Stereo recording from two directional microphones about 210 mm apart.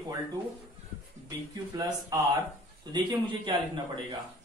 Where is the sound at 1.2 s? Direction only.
15° right (ahead or behind).